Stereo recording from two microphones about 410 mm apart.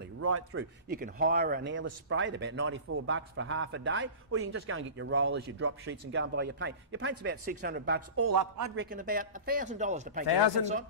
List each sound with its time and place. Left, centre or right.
0.2 s a man's voice: right
8.3 s a man's voice: right
8.7 s a man's voice: right